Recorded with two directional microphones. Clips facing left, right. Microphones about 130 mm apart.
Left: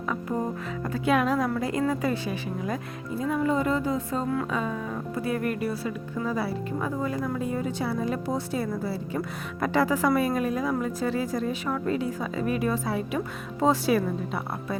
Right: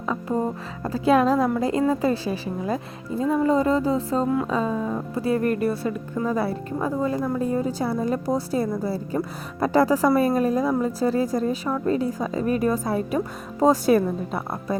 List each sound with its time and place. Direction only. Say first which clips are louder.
0.0 s music: right 3 dB; 30° right (ahead or behind)
0.9 s a woman's voice: right 5 dB; 35° right (ahead or behind); by 6.5 s 50° right (ahead or behind)
6.7 s a woman's voice: right 6 dB; 30° right (ahead or behind)